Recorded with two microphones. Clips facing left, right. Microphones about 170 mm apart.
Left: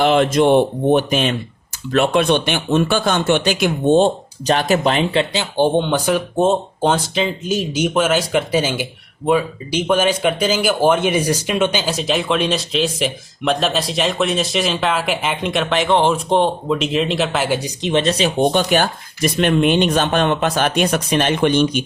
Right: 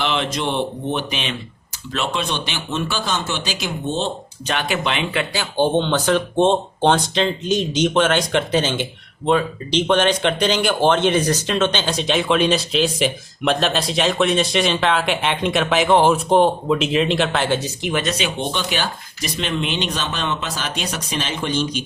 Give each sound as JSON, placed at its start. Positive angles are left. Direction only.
{"t": 0.0, "sound": "speech", "side_deg": 50}
{"t": 4.4, "sound": "speech", "side_deg": 40}
{"t": 5.1, "sound": "speech", "side_deg": 20}
{"t": 17.8, "sound": "speech", "side_deg": 30}
{"t": 18.5, "sound": "speech", "side_deg": 50}